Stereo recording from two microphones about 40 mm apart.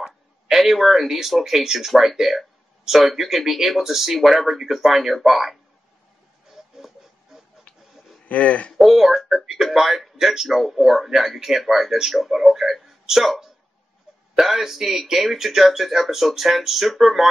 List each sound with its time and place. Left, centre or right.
0.0 s speech: centre
8.3 s speech: left
8.8 s speech: centre